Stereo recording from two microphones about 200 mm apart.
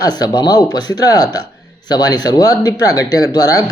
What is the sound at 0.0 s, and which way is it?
Speech, 20° left (ahead or behind).